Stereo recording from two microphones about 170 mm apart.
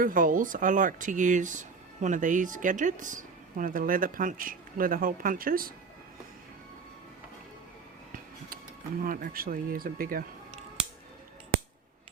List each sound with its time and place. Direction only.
0.0 s speech: 55° right (ahead or behind)
9.0 s speech: 55° right (ahead or behind)